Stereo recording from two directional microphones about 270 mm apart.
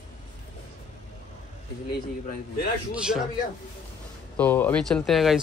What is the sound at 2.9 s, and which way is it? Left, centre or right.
Speech, centre.